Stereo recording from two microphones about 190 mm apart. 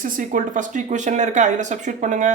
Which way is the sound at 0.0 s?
45° right (ahead or behind).